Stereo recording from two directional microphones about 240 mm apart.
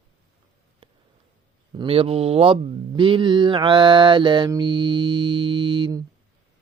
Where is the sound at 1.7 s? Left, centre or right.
Right.